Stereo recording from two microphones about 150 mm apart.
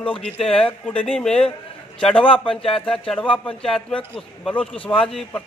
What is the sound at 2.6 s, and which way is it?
A man's voice, 5° left (ahead or behind).